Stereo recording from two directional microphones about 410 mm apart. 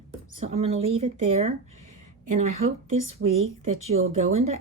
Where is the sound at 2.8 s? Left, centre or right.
Right.